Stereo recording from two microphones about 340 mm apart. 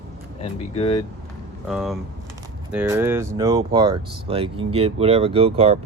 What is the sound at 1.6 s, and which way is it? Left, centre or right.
Speech, centre.